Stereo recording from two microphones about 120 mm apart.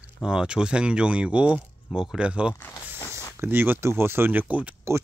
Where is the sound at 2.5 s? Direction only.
20° left (ahead or behind).